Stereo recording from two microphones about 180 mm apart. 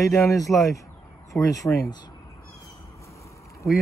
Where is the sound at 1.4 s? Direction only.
20° left (ahead or behind).